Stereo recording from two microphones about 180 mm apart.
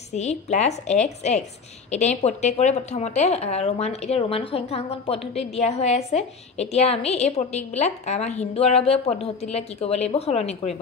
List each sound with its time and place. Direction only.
0.1 s speech: 40° left (ahead or behind)